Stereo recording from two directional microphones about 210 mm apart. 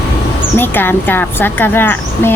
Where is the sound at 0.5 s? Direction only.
10° left (ahead or behind).